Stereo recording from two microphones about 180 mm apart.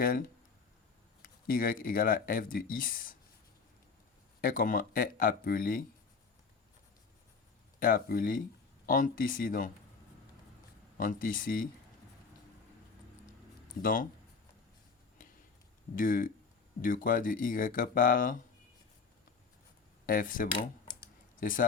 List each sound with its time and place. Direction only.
0.0 s speech: 55° left (ahead or behind)
4.4 s speech: 50° left (ahead or behind)
7.8 s speech: 50° left (ahead or behind)
10.9 s speech: 50° left (ahead or behind)
13.8 s speech: 50° left (ahead or behind)
16.0 s speech: 50° left (ahead or behind)
20.1 s speech: 50° left (ahead or behind)